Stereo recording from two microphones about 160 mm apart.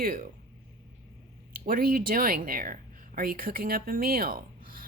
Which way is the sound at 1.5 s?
65° right (ahead or behind).